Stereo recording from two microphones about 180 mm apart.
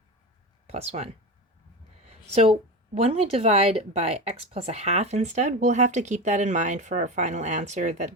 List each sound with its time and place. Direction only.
0.7 s speech: 35° right (ahead or behind)